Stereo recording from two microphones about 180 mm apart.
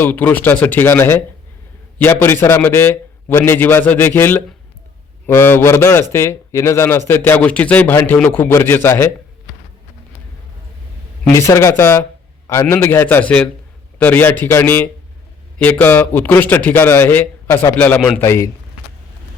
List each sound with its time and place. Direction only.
0.0 s speech: 10° left (ahead or behind)
11.3 s speech: 15° left (ahead or behind)
18.2 s speech: 15° left (ahead or behind)